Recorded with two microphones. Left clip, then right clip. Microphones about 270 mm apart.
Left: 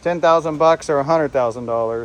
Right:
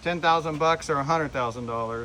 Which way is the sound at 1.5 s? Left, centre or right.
Left.